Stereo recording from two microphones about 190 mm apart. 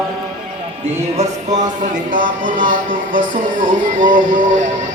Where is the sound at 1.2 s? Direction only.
40° right (ahead or behind).